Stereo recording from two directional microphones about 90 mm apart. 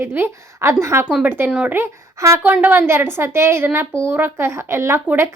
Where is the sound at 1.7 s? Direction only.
30° right (ahead or behind).